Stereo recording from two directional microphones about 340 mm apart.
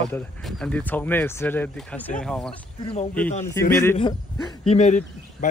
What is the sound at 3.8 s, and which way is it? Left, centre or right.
A man's voice, centre.